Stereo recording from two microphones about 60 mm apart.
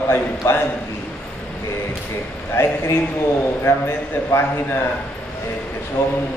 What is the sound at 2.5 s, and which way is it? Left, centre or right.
Speech, left.